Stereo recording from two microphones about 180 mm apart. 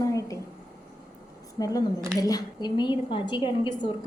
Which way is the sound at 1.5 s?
20° left (ahead or behind).